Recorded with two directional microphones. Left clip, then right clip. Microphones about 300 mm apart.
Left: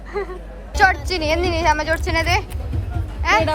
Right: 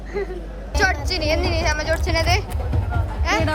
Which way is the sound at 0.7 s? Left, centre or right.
Centre.